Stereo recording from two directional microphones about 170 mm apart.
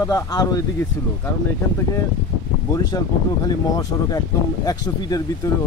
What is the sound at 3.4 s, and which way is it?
Speech, 20° left (ahead or behind).